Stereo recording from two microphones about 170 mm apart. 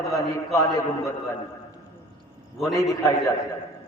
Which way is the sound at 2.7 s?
20° left (ahead or behind).